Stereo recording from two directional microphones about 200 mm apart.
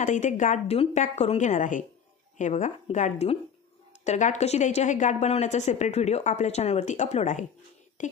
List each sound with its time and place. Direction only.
0.0 s a woman's voice: 40° left (ahead or behind)